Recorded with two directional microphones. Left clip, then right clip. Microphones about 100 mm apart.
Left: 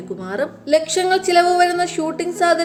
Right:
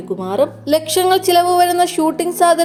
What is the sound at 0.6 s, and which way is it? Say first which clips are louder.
A woman's voice: left 2 dB; 20° right (ahead or behind).